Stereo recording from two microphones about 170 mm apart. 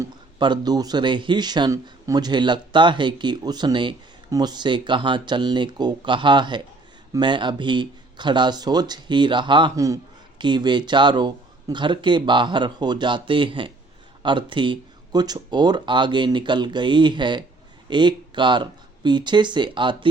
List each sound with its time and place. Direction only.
0.0 s speech: 25° right (ahead or behind)